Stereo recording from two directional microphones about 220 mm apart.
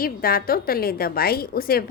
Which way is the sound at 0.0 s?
40° left (ahead or behind).